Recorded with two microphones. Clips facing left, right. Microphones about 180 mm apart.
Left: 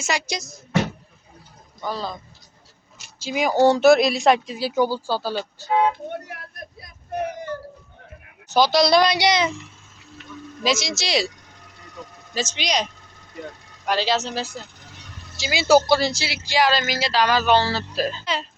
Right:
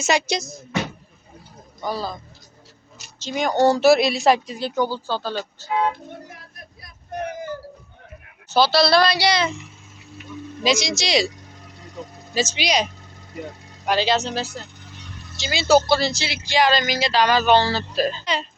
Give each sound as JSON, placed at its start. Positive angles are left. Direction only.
{"t": 0.0, "sound": "speech", "side_deg": -25}
{"t": 1.8, "sound": "speech", "side_deg": -10}
{"t": 3.2, "sound": "speech", "side_deg": 5}
{"t": 6.3, "sound": "a sound", "side_deg": 65}
{"t": 7.1, "sound": "child singing", "side_deg": 5}
{"t": 8.4, "sound": "a woman's voice", "side_deg": 15}
{"t": 10.6, "sound": "speech", "side_deg": 5}
{"t": 12.0, "sound": "speech", "side_deg": -20}
{"t": 12.3, "sound": "speech", "side_deg": -5}
{"t": 13.3, "sound": "a sound", "side_deg": -10}
{"t": 13.9, "sound": "speech", "side_deg": 0}